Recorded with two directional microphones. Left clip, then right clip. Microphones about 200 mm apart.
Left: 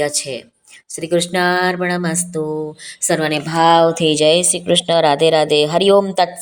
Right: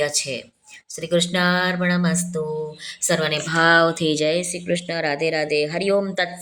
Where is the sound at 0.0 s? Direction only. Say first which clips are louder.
Left 3 dB; 20° left (ahead or behind).